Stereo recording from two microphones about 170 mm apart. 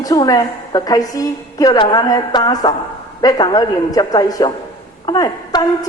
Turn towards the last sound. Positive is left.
turn(degrees=25)  # may be behind; listen again after turning